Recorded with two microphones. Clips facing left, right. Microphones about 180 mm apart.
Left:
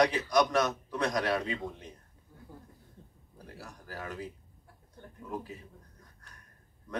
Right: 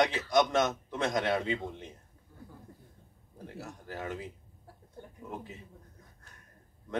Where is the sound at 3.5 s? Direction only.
25° right (ahead or behind).